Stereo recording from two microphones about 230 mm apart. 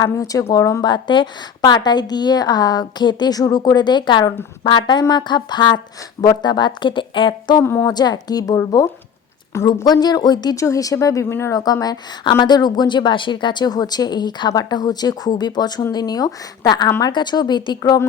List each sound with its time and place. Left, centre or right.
0.0 s speech: centre